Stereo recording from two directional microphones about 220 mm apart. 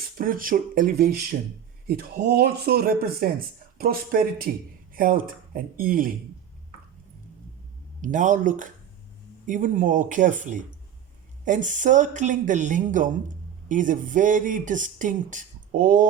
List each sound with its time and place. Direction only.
0.2 s speech: 40° right (ahead or behind)
8.0 s speech: 35° right (ahead or behind)